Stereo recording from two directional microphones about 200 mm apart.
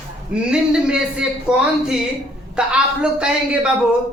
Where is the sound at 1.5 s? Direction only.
5° right (ahead or behind).